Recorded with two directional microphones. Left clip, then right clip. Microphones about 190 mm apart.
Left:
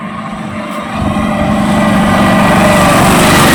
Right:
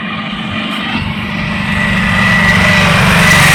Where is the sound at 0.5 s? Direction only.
35° left (ahead or behind).